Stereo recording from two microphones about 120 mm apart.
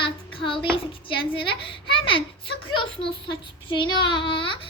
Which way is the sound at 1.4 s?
45° left (ahead or behind).